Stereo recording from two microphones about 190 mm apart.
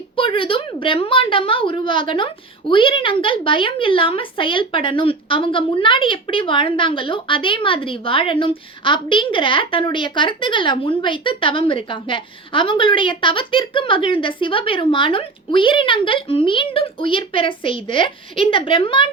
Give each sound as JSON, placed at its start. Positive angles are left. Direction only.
{"t": 0.2, "sound": "a woman's voice", "side_deg": 25}